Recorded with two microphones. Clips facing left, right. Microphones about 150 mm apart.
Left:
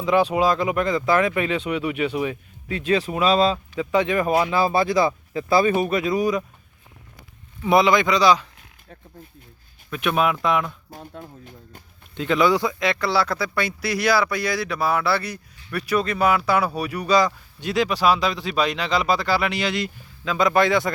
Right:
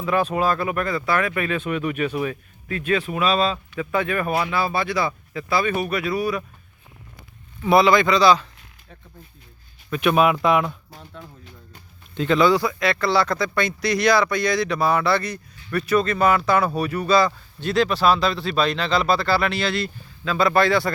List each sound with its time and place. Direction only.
0.0 s speech: 15° left (ahead or behind)
7.6 s speech: 15° left (ahead or behind)
9.9 s speech: centre (ahead or behind)
10.9 s speech: 45° left (ahead or behind)
12.1 s speech: 10° left (ahead or behind)